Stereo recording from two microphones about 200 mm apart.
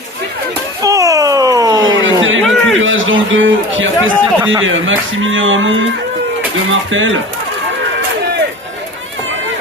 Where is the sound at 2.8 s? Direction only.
75° right (ahead or behind).